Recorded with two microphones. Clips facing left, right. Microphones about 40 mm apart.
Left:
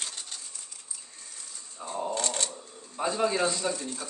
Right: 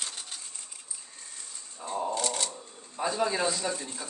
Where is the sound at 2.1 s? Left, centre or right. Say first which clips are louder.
Even; left.